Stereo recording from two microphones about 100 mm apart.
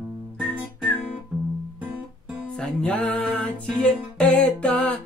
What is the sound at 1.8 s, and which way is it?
Music, 10° right (ahead or behind).